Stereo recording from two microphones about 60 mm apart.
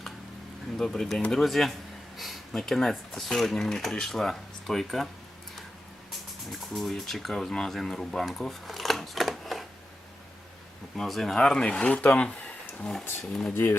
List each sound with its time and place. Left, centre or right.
0.8 s speech: centre
6.1 s speech: centre
7.5 s camera: centre
10.9 s speech: centre
11.9 s speech: left
12.2 s a sound: centre
12.9 s speech: centre